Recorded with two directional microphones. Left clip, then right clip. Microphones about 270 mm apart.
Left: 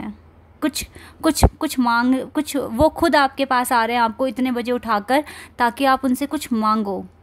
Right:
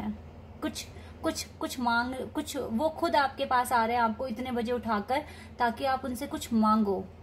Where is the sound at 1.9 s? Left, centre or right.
Left.